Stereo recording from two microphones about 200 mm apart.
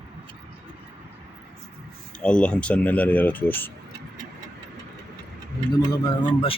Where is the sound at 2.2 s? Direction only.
5° left (ahead or behind).